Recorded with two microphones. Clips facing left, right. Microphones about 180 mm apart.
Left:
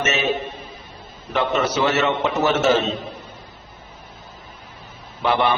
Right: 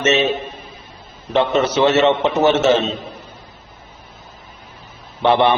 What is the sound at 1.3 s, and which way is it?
A man's voice, 30° right (ahead or behind).